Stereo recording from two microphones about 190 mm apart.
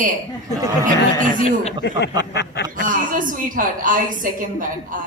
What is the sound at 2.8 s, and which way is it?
A woman's voice, 45° right (ahead or behind).